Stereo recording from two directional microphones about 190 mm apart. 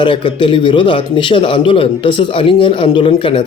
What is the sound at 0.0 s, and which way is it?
A man's voice, 25° left (ahead or behind).